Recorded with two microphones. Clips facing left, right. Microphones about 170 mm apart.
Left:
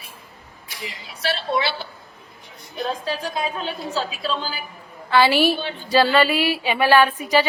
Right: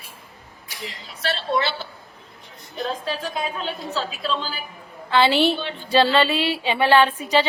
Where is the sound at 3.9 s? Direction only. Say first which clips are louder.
Even; centre (ahead or behind).